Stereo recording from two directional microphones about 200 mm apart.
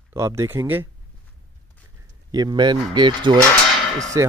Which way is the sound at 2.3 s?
20° right (ahead or behind).